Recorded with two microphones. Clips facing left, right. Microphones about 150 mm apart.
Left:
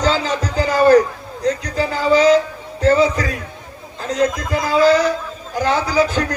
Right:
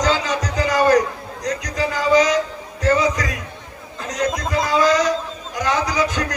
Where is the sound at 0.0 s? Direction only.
30° left (ahead or behind).